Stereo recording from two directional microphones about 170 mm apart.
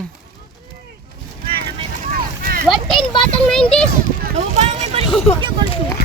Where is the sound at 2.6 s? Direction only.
Centre (ahead or behind).